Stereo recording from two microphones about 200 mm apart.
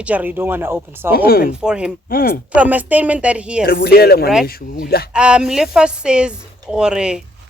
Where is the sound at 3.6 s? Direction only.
50° left (ahead or behind).